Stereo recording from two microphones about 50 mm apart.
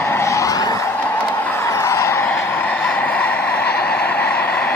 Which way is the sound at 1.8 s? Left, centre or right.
Left.